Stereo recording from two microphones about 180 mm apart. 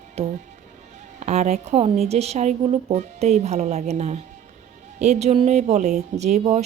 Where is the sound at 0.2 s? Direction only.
35° right (ahead or behind).